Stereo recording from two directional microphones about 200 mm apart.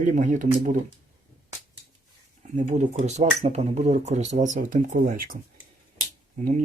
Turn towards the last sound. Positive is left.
turn(degrees=-35)  # may be behind; listen again after turning